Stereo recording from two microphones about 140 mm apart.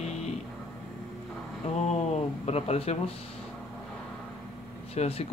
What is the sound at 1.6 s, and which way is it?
Speech, 50° left (ahead or behind).